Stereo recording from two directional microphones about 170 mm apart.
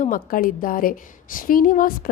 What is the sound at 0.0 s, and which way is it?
A woman's voice, 55° left (ahead or behind).